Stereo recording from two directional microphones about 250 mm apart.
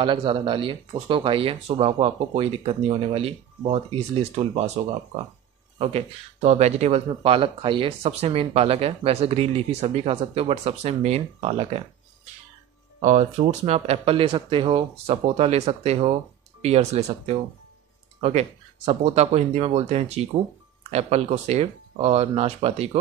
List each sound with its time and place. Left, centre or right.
0.0 s speech: centre
5.8 s speech: right
13.0 s speech: right
18.2 s speech: right